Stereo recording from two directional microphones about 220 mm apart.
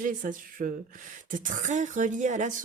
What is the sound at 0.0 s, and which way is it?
Speech, 35° right (ahead or behind).